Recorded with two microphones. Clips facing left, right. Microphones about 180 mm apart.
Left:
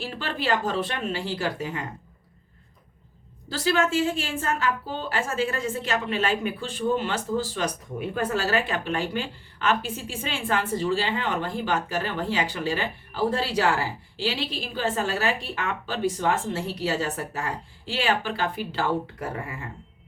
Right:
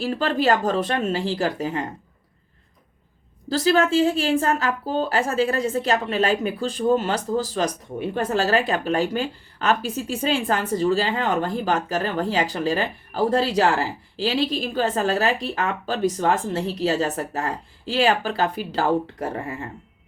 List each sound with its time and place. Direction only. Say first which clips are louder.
0.0 s a woman's voice: right 9 dB; 40° right (ahead or behind)
3.5 s a woman's voice: right 5 dB; 35° right (ahead or behind)